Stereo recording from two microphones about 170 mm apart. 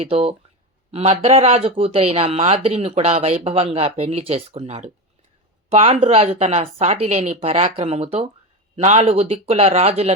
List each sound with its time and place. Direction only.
0.0 s speech: 35° right (ahead or behind)